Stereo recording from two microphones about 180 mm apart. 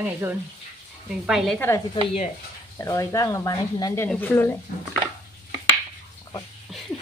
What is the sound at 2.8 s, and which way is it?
Speech, 15° left (ahead or behind).